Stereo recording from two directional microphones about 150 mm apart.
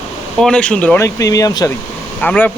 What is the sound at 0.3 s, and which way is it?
Speech, 5° left (ahead or behind).